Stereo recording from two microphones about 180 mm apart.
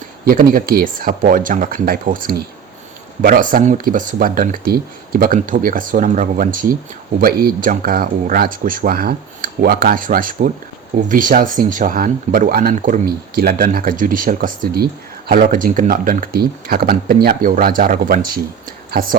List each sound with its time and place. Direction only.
0.3 s speech: 50° right (ahead or behind)